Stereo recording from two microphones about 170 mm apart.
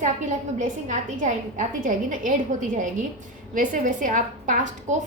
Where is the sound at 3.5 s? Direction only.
50° right (ahead or behind).